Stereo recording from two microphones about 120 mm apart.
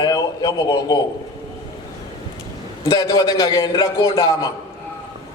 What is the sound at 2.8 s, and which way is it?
A man's voice, 30° left (ahead or behind).